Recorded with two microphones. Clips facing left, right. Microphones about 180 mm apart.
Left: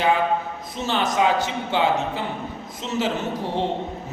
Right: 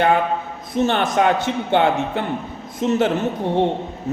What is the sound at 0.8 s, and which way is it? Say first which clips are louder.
A man's voice: right 4 dB; 55° right (ahead or behind).